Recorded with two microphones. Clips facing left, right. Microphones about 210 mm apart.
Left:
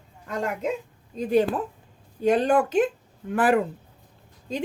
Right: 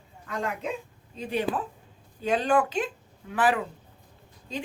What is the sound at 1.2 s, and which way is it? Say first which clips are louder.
Speech: left 7 dB; 45° left (ahead or behind).